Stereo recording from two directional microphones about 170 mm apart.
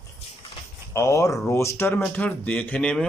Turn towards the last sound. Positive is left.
turn(degrees=5)  # may be behind; listen again after turning